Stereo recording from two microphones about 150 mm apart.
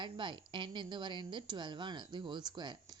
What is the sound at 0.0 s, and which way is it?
A woman's voice, 30° right (ahead or behind).